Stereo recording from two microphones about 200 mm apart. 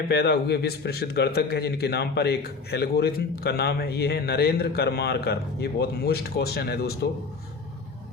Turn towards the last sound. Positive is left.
turn(degrees=55)  # may be behind; listen again after turning